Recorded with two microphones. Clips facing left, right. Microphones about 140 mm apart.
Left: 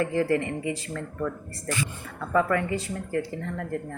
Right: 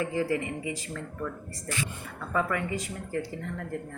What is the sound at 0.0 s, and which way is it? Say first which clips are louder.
Speech: left 4 dB; 15° right (ahead or behind).